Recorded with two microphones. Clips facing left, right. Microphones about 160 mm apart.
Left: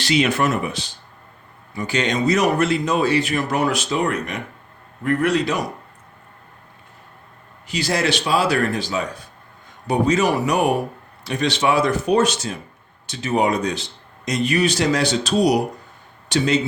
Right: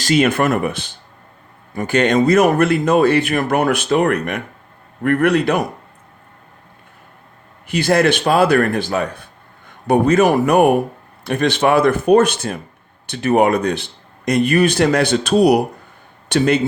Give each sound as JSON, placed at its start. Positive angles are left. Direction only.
{"t": 0.0, "sound": "speech", "side_deg": -50}
{"t": 7.7, "sound": "speech", "side_deg": -55}